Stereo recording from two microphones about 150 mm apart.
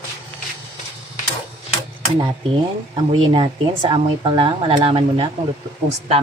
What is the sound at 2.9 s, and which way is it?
Speech, 35° right (ahead or behind).